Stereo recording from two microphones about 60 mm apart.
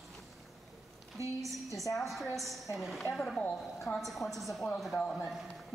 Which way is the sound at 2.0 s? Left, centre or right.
Centre.